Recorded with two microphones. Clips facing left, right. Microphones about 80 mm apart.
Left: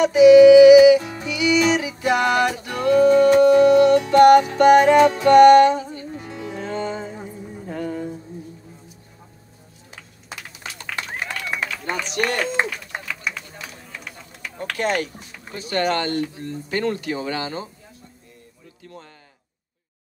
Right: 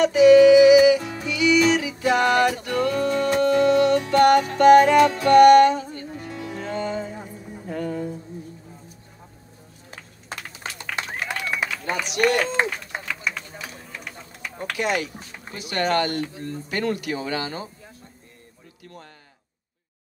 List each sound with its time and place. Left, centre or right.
0.0 s music: centre
9.8 s a sound: right
10.8 s run: centre
12.1 s speech: left
14.8 s speech: left